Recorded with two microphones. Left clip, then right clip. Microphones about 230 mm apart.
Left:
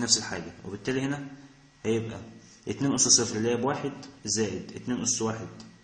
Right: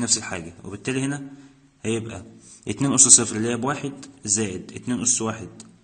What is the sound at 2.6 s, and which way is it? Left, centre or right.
Speech, right.